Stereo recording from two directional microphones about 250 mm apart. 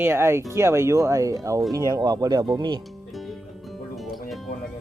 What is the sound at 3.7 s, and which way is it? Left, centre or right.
Music, centre.